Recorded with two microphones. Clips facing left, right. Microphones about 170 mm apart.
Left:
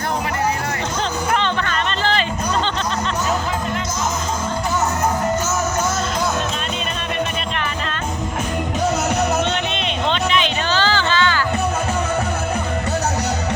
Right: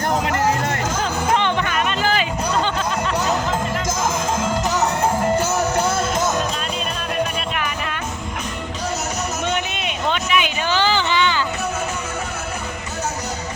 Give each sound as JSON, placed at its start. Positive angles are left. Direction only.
{"t": 1.4, "sound": "music", "side_deg": -10}
{"t": 10.1, "sound": "music", "side_deg": -10}